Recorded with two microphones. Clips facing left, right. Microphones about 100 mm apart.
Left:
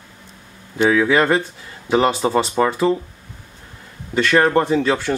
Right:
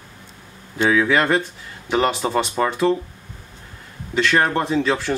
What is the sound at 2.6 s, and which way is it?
Speech, 15° left (ahead or behind).